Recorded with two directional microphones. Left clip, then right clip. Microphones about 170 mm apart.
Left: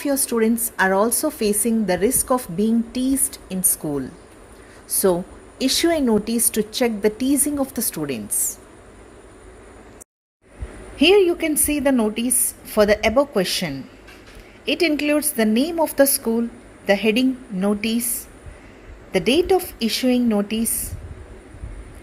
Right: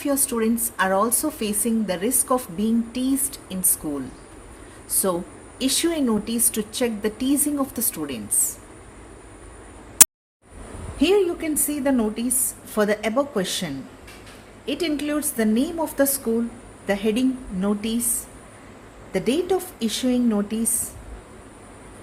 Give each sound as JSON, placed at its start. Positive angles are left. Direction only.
{"t": 0.0, "sound": "speech", "side_deg": 30}
{"t": 5.0, "sound": "speech", "side_deg": 35}
{"t": 10.9, "sound": "a woman's voice", "side_deg": 25}
{"t": 19.1, "sound": "a woman's voice", "side_deg": 25}